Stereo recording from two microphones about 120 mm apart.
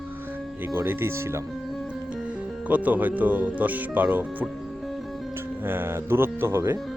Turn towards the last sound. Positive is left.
turn(degrees=-20)  # may be behind; listen again after turning